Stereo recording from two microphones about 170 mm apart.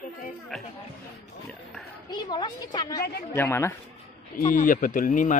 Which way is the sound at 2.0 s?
25° left (ahead or behind).